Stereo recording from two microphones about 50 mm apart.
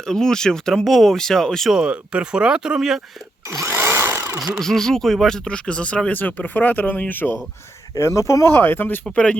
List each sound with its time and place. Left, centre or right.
0.0 s speech: centre
1.7 s speech: centre
3.7 s a sound: right
4.6 s speech: centre
5.5 s speech: left
6.1 s speech: left
7.9 s speech: left
8.5 s speech: left
9.1 s speech: left